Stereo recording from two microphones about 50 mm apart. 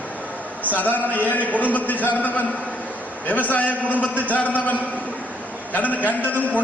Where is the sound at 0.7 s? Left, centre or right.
Left.